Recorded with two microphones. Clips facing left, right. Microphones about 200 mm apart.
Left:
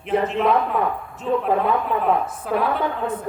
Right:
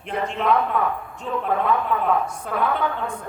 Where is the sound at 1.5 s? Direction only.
30° left (ahead or behind).